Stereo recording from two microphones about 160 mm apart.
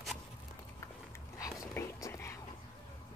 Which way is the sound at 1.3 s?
20° left (ahead or behind).